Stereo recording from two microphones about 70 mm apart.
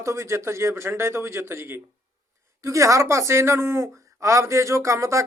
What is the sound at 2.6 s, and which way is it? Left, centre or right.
Speech, right.